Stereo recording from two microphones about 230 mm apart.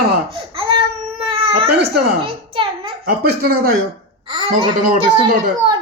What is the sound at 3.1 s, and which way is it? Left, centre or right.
Speech, right.